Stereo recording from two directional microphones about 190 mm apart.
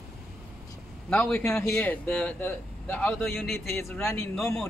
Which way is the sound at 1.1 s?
5° left (ahead or behind).